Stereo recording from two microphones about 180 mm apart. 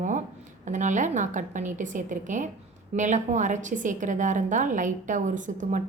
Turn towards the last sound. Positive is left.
turn(degrees=-45)  # may be behind; listen again after turning